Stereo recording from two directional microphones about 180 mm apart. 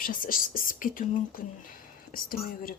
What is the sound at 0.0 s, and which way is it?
Speech, 50° left (ahead or behind).